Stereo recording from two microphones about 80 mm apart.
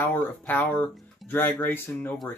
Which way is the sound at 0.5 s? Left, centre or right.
Left.